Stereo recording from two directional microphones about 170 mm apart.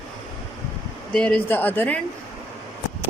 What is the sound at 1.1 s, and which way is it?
Speech, 5° left (ahead or behind).